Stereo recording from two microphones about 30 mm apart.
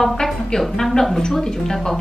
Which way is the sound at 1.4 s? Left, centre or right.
Centre.